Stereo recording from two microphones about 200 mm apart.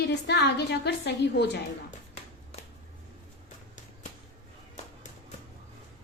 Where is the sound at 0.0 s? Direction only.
60° left (ahead or behind).